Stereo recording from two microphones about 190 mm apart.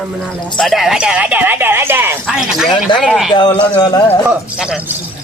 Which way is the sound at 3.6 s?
20° left (ahead or behind).